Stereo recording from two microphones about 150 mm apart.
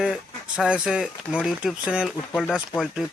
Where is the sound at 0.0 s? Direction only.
5° right (ahead or behind).